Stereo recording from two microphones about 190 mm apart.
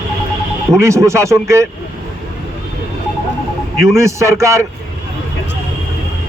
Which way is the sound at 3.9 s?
15° right (ahead or behind).